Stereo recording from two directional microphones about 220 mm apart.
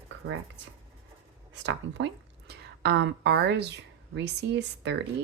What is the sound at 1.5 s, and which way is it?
Speech, 55° right (ahead or behind).